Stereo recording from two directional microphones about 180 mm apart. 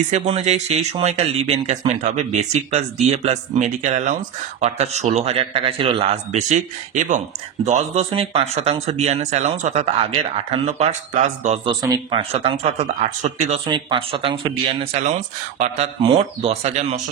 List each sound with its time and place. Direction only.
0.1 s speech: 40° right (ahead or behind)
11.6 s speech: 25° right (ahead or behind); by 13.6 s 40° right (ahead or behind)
13.7 s speech: 25° right (ahead or behind)